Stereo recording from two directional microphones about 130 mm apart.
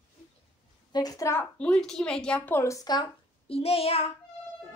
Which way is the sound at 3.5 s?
50° left (ahead or behind).